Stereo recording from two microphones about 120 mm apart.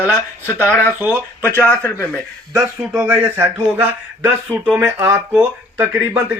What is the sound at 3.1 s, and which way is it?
Speech, 15° right (ahead or behind).